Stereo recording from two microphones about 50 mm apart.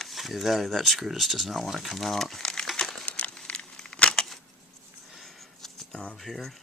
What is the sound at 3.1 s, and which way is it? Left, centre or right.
Crumpling, left.